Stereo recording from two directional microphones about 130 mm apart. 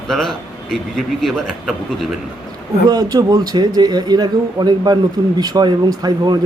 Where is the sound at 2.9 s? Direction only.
30° right (ahead or behind).